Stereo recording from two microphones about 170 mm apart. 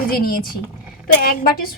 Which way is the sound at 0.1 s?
60° left (ahead or behind).